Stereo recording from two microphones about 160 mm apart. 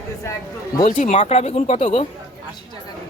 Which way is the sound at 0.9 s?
50° left (ahead or behind).